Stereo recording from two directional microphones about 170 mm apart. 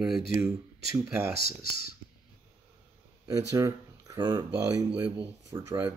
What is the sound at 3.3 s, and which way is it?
Speech, 20° right (ahead or behind).